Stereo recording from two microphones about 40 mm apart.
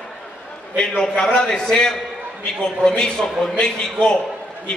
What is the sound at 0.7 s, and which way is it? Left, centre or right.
A man's voice, left.